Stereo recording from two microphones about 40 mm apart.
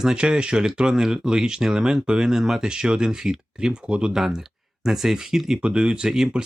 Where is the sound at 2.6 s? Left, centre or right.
Right.